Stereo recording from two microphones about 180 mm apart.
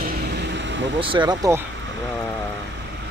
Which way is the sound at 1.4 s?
15° right (ahead or behind).